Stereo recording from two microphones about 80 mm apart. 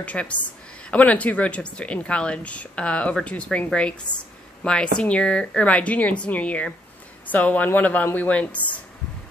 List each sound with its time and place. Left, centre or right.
0.0 s a woman's voice: centre